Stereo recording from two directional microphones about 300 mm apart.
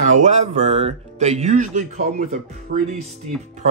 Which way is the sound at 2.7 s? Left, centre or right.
Right.